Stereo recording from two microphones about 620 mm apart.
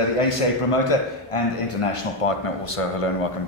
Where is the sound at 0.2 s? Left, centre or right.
Left.